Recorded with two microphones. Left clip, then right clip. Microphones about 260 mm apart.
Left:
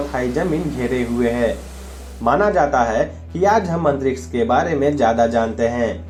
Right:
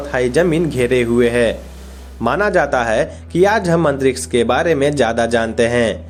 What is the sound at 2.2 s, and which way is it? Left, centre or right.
A man's voice, right.